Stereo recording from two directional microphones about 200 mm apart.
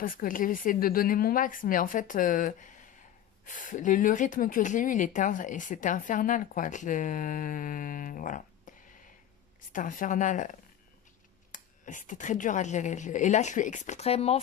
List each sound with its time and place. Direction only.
0.0 s speech: 45° left (ahead or behind)
8.7 s a sound: 40° left (ahead or behind)
9.7 s speech: 40° left (ahead or behind)
11.5 s speech: 40° left (ahead or behind)